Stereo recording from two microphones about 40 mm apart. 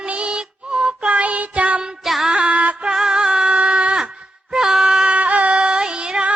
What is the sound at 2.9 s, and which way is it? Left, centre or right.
Music, centre.